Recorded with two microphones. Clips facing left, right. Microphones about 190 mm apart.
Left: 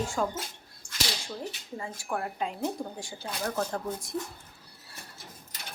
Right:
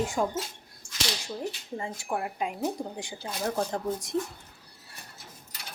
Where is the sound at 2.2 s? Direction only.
10° right (ahead or behind).